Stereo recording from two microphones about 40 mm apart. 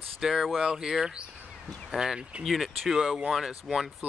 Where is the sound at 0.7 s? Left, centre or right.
Centre.